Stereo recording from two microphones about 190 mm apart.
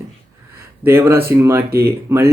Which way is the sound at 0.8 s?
15° right (ahead or behind).